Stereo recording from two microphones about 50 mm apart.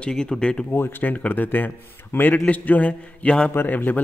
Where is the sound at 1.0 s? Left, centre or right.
Left.